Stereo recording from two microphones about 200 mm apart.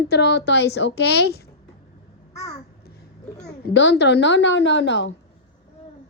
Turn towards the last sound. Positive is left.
turn(degrees=65)  # may be behind; listen again after turning